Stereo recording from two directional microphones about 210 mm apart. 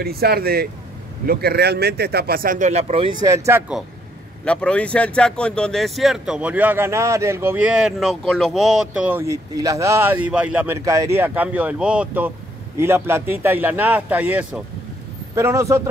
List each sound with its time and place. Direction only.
0.0 s speech: 45° right (ahead or behind); by 3.8 s 10° right (ahead or behind)
4.5 s a man's voice: 5° left (ahead or behind); by 15.9 s 15° right (ahead or behind)